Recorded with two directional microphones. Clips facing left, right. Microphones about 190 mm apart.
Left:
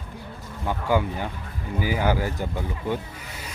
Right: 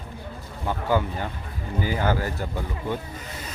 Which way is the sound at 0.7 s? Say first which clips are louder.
Left 1 dB; 15° left (ahead or behind).